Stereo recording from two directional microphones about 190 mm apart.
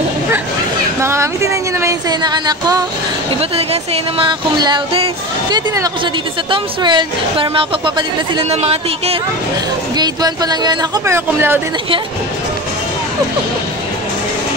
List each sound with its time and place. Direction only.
1.0 s speech: 15° right (ahead or behind)
3.3 s speech: 30° right (ahead or behind)
9.9 s speech: 20° right (ahead or behind)